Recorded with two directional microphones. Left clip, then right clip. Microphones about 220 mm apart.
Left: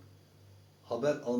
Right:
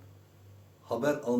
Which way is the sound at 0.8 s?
15° right (ahead or behind).